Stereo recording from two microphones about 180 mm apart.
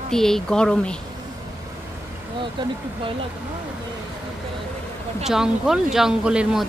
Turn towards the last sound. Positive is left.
turn(degrees=-5)  # may be behind; listen again after turning